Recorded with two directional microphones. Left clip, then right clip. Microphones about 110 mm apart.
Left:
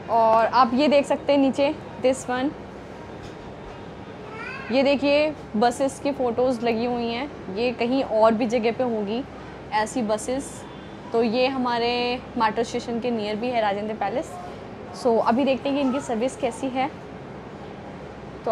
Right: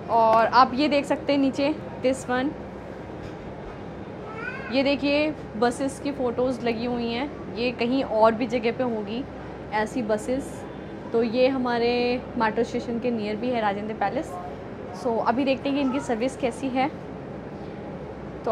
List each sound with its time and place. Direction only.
0.1 s speech: 25° left (ahead or behind)
4.6 s a woman's voice: 30° left (ahead or behind)